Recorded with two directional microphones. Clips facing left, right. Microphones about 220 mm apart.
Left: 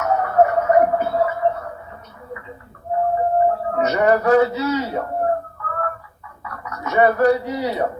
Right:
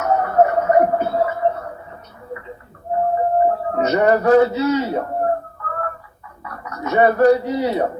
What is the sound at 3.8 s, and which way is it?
Speech, 25° right (ahead or behind).